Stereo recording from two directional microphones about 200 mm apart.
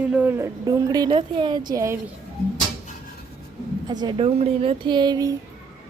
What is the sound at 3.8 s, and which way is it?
Speech, 20° right (ahead or behind).